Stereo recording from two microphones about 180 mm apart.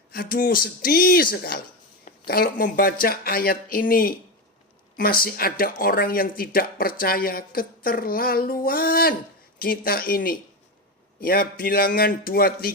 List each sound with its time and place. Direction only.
0.1 s speech: 55° left (ahead or behind)